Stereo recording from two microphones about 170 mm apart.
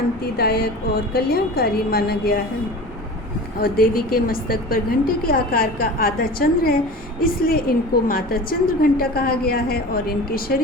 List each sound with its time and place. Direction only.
0.3 s a sound: 65° left (ahead or behind)
1.1 s a woman's voice: 65° left (ahead or behind)
3.6 s a woman's voice: 60° left (ahead or behind)